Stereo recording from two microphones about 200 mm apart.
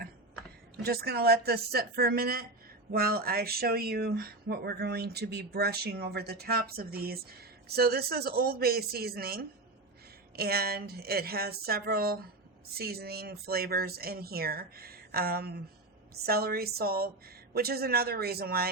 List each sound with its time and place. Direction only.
0.8 s speech: 50° right (ahead or behind)